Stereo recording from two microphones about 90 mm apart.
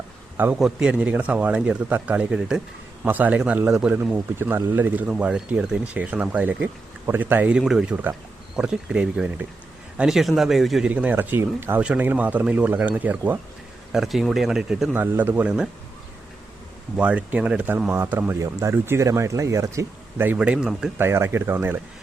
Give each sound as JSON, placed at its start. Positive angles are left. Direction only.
{"t": 0.5, "sound": "speech", "side_deg": -10}
{"t": 7.6, "sound": "speech", "side_deg": -5}
{"t": 10.8, "sound": "speech", "side_deg": -15}
{"t": 13.9, "sound": "speech", "side_deg": -5}
{"t": 14.9, "sound": "speech", "side_deg": -25}
{"t": 15.4, "sound": "speech", "side_deg": -10}
{"t": 17.0, "sound": "speech", "side_deg": -15}
{"t": 17.8, "sound": "speech", "side_deg": -30}
{"t": 18.3, "sound": "speech", "side_deg": -35}
{"t": 20.2, "sound": "speech", "side_deg": -15}
{"t": 21.0, "sound": "speech", "side_deg": -30}